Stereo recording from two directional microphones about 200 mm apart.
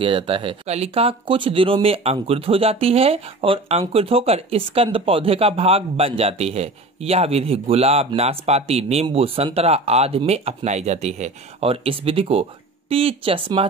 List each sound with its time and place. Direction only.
0.0 s speech: 25° right (ahead or behind)